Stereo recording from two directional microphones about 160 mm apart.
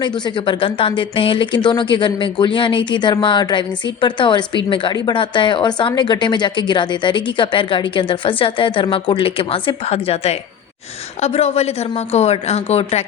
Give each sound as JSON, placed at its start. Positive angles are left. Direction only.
{"t": 0.0, "sound": "speech", "side_deg": 30}